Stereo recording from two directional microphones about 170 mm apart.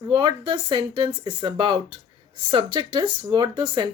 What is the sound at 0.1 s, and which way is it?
Speech, 30° right (ahead or behind).